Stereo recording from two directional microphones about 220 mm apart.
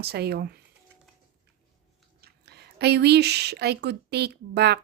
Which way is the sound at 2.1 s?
45° right (ahead or behind).